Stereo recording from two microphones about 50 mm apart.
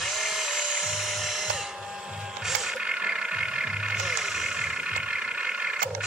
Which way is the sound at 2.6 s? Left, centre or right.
Centre.